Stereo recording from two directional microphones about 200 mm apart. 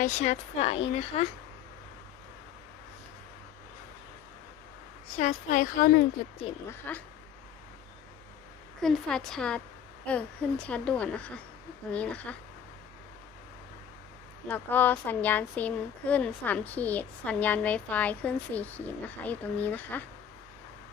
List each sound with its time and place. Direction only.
0.0 s speech: 35° left (ahead or behind)
5.1 s speech: 40° left (ahead or behind)
6.7 s speech: 10° left (ahead or behind)
8.8 s a woman's voice: 5° left (ahead or behind)
14.4 s speech: 10° left (ahead or behind)